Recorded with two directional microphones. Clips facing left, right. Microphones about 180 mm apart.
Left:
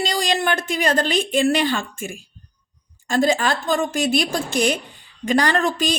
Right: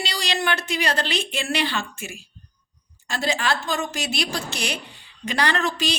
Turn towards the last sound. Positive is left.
turn(degrees=50)  # may be behind; listen again after turning